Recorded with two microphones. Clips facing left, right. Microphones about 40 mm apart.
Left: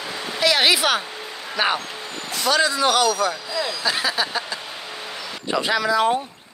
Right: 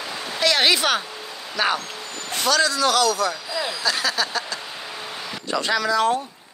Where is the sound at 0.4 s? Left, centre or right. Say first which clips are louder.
Left 1 dB; centre.